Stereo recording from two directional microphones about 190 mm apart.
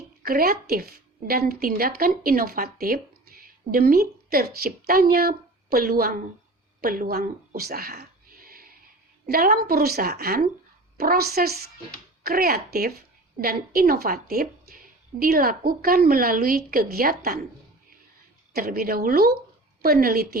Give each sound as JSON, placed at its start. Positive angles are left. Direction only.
{"t": 0.2, "sound": "a woman's voice", "side_deg": -50}
{"t": 18.5, "sound": "a woman's voice", "side_deg": -55}